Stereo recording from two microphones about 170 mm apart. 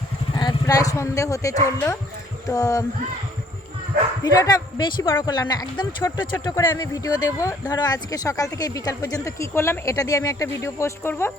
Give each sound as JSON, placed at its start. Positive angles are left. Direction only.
{"t": 0.3, "sound": "speech", "side_deg": 25}
{"t": 4.2, "sound": "speech", "side_deg": 20}